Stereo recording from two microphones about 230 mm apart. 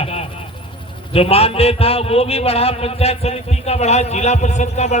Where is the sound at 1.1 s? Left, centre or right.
Left.